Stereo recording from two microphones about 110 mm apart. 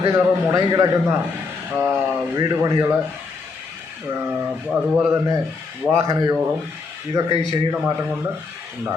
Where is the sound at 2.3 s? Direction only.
30° right (ahead or behind).